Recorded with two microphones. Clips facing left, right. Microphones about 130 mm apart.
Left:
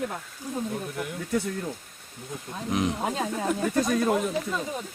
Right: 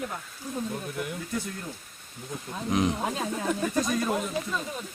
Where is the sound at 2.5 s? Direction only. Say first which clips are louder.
Right 1 dB; centre (ahead or behind).